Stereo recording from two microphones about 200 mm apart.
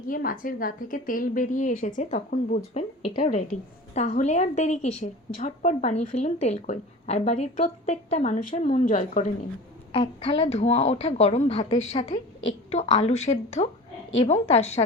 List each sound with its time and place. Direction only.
0.1 s a woman's voice: 45° left (ahead or behind)
3.0 s a woman's voice: 25° left (ahead or behind)
9.9 s a woman's voice: 30° left (ahead or behind)